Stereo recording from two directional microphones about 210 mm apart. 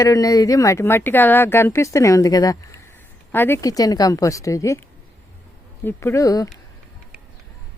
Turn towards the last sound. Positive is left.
turn(degrees=15)  # may be behind; listen again after turning